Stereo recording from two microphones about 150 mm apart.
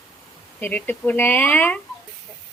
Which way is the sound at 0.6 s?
10° left (ahead or behind).